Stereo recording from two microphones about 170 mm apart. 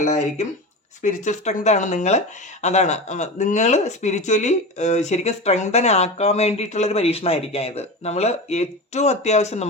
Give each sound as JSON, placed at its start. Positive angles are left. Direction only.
{"t": 0.0, "sound": "speech", "side_deg": 45}